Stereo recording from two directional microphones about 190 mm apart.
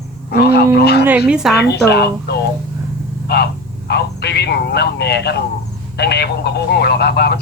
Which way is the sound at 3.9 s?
60° left (ahead or behind).